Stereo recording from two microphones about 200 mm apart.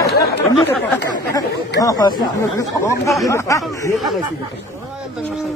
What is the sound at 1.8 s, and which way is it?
Speech, 20° left (ahead or behind).